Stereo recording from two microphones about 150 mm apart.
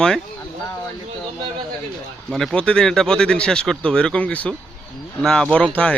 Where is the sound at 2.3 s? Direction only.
5° left (ahead or behind).